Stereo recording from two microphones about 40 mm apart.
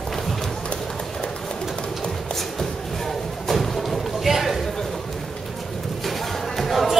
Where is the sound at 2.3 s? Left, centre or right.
Centre.